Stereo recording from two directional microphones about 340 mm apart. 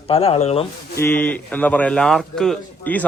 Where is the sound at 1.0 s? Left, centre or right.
Centre.